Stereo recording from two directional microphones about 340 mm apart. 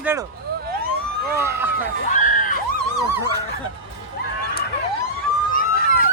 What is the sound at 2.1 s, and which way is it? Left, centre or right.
Screaming, left.